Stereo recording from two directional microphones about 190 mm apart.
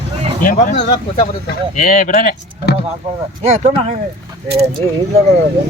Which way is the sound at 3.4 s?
35° right (ahead or behind).